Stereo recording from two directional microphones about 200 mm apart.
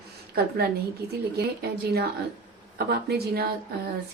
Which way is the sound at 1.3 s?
50° right (ahead or behind).